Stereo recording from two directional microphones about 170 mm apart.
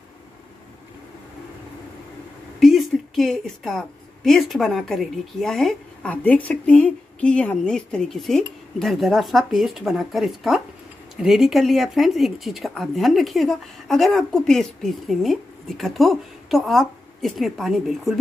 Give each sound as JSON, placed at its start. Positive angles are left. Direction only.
{"t": 2.6, "sound": "a woman's voice", "side_deg": 0}